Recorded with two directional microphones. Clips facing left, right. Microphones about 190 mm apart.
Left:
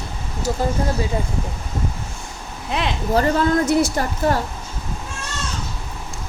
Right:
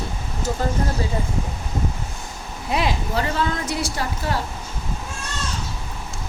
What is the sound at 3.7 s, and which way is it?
Speech, 45° left (ahead or behind).